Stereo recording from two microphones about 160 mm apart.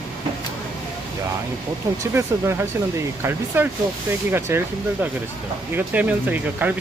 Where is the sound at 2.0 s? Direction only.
20° right (ahead or behind).